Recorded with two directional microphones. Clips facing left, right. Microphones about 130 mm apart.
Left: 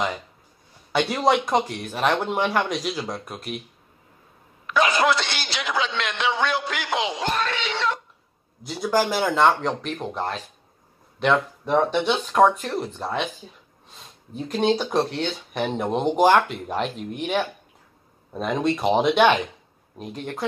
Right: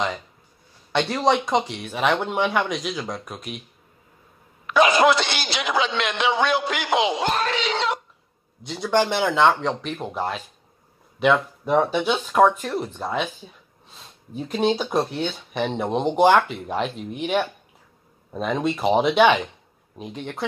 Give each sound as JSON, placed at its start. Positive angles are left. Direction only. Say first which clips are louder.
{"t": 0.9, "sound": "speech", "louder": "even", "side_deg": 5}
{"t": 4.7, "sound": "speech", "louder": "right 4 dB", "side_deg": -15}
{"t": 8.6, "sound": "speech", "louder": "right 1 dB", "side_deg": 0}